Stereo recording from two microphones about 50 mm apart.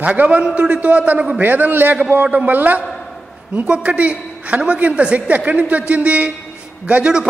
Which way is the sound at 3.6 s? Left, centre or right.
Right.